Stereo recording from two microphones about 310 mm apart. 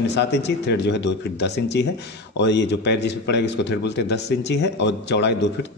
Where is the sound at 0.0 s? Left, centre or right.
Left.